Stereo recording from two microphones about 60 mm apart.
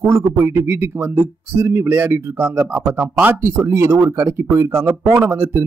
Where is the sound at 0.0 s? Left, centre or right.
Right.